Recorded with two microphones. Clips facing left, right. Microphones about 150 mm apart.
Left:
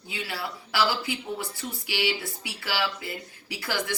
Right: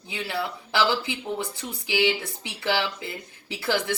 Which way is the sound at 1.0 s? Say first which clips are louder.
Right 2 dB; 20° right (ahead or behind).